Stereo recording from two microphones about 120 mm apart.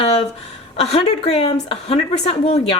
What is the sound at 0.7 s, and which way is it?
A woman's voice, 60° left (ahead or behind).